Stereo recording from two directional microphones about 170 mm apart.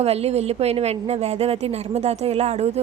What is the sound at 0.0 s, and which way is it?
A woman's voice, 35° right (ahead or behind).